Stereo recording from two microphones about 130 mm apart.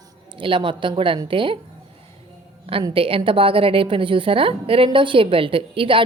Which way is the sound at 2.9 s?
45° right (ahead or behind).